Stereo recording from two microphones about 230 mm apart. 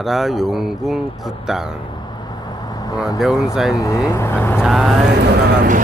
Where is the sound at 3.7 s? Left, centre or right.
Centre.